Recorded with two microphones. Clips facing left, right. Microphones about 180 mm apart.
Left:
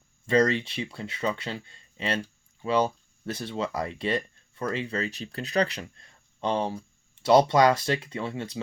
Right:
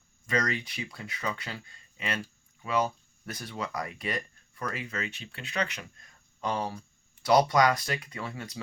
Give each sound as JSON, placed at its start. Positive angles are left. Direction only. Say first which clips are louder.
{"t": 0.3, "sound": "speech", "louder": "left 8 dB", "side_deg": 30}